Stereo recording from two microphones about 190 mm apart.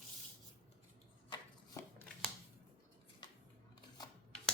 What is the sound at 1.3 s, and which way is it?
Chopping, 15° left (ahead or behind).